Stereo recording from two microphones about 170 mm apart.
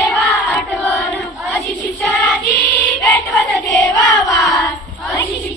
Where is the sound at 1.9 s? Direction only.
10° left (ahead or behind).